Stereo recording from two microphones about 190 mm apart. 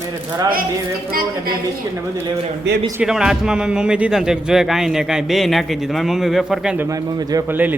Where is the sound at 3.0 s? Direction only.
5° right (ahead or behind).